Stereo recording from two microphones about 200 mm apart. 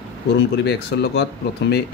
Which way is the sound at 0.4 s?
55° left (ahead or behind).